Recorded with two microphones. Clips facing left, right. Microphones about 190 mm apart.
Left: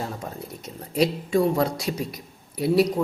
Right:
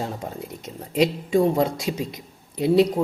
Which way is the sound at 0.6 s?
20° right (ahead or behind).